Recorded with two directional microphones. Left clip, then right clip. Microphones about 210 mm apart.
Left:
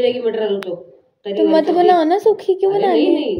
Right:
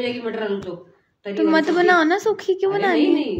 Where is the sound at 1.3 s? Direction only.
50° right (ahead or behind).